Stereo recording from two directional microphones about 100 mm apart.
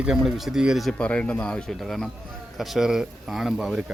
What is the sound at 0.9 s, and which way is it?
Speech, 10° left (ahead or behind).